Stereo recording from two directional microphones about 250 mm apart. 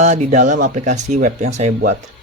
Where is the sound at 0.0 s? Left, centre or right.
Right.